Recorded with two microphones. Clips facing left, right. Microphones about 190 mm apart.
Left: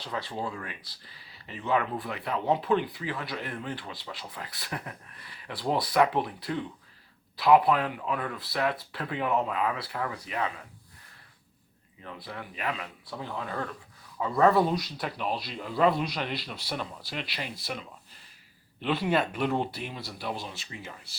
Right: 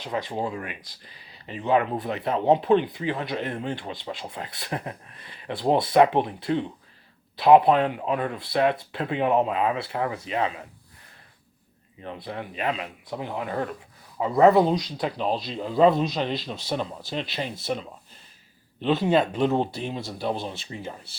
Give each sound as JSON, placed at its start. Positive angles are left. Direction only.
{"t": 0.0, "sound": "speech", "side_deg": -20}
{"t": 12.0, "sound": "speech", "side_deg": -25}
{"t": 14.8, "sound": "speech", "side_deg": 5}
{"t": 15.0, "sound": "speech", "side_deg": -25}